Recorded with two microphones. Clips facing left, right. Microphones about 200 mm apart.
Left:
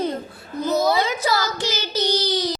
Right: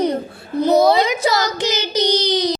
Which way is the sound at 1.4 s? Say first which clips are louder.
Right 5 dB; 20° right (ahead or behind).